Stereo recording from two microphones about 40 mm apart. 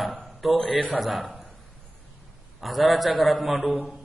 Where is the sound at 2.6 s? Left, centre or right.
Centre.